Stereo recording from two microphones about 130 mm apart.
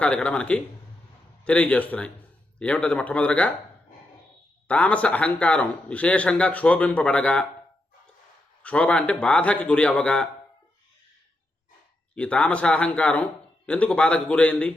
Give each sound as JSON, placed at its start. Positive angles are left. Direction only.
{"t": 0.0, "sound": "speech", "side_deg": 10}
{"t": 4.7, "sound": "speech", "side_deg": 10}
{"t": 8.6, "sound": "speech", "side_deg": 10}
{"t": 12.1, "sound": "speech", "side_deg": 10}